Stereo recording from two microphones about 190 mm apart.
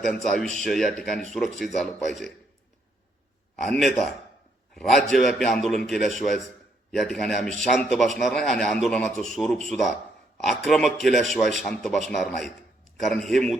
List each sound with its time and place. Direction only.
0.1 s a man's voice: centre (ahead or behind)
3.5 s a man's voice: centre (ahead or behind)